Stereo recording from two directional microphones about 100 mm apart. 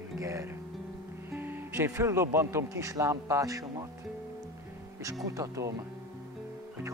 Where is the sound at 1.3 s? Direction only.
20° right (ahead or behind).